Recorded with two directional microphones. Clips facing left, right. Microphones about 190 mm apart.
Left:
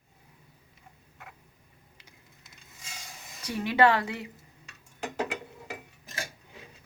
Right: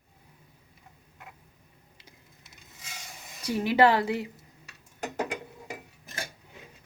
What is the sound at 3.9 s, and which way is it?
Speech, 35° right (ahead or behind).